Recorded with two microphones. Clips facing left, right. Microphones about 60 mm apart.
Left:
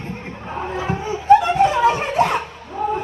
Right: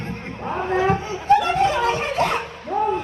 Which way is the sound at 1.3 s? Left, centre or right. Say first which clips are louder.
Left 4 dB; centre.